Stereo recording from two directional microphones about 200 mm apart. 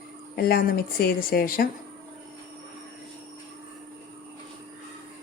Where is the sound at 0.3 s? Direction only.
50° left (ahead or behind).